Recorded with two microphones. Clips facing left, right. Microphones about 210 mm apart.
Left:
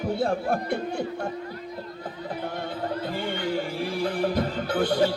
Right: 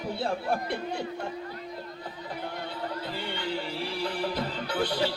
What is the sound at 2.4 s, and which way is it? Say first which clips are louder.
Music: left 4 dB; 45° left (ahead or behind).